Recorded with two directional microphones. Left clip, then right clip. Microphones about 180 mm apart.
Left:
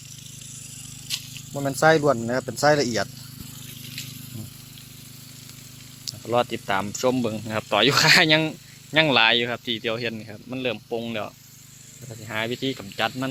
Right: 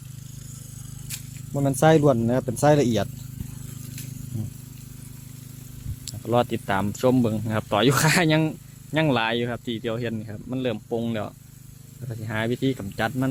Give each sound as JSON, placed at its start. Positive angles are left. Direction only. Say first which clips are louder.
{"t": 1.8, "sound": "speech", "louder": "even", "side_deg": -25}
{"t": 6.1, "sound": "speech", "louder": "even", "side_deg": -15}
{"t": 12.3, "sound": "speech", "louder": "right 1 dB", "side_deg": -20}